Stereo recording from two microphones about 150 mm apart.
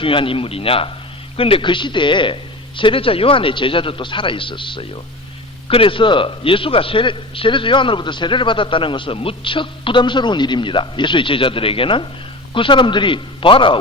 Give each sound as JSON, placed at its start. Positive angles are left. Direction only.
{"t": 0.0, "sound": "a man's voice", "side_deg": 35}